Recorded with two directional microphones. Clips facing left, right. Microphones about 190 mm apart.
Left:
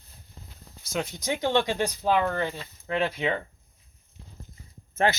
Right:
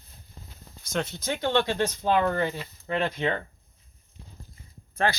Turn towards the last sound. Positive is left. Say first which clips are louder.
# left 2 dB
turn(degrees=20)  # may be behind; listen again after turning